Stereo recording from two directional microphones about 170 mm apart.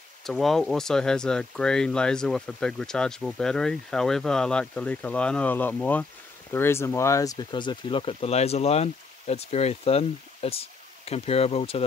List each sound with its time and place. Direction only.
0.2 s speech: centre (ahead or behind); by 11.8 s 35° left (ahead or behind)